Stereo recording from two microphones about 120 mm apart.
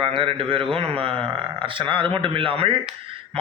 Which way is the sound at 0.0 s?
50° right (ahead or behind).